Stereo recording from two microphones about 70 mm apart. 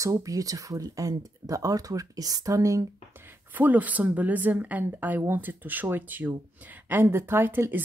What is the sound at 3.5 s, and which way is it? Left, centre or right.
Speech, right.